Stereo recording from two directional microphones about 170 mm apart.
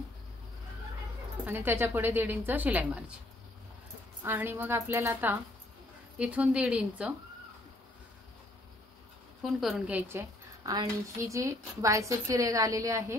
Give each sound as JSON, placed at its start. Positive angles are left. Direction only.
{"t": 1.4, "sound": "a woman's voice", "side_deg": -10}
{"t": 4.2, "sound": "a woman's voice", "side_deg": -10}
{"t": 9.4, "sound": "a woman's voice", "side_deg": 0}